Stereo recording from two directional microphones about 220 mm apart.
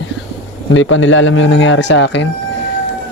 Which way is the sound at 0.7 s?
60° left (ahead or behind).